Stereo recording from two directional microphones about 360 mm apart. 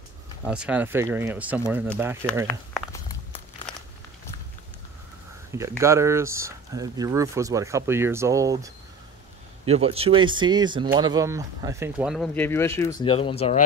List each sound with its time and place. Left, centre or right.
0.5 s speech: centre
2.4 s a sound: centre
5.6 s speech: centre